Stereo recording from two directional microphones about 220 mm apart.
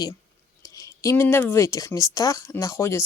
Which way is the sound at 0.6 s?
15° left (ahead or behind).